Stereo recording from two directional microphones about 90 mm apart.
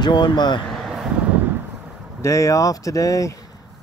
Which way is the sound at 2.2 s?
35° left (ahead or behind).